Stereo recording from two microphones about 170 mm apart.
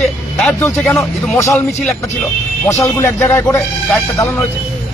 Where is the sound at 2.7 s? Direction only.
15° left (ahead or behind).